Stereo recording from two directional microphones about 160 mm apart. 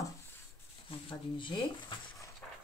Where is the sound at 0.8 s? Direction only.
30° left (ahead or behind).